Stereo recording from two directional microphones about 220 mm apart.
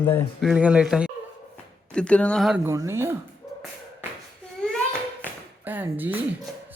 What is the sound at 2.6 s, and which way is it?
Speech, 10° right (ahead or behind).